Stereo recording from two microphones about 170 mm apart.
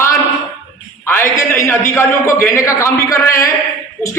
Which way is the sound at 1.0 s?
15° left (ahead or behind).